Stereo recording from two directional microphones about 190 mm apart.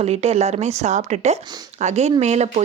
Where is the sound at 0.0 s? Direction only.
35° right (ahead or behind).